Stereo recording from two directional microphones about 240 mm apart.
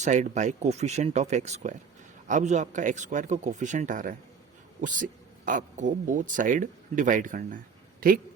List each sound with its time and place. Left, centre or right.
0.0 s speech: right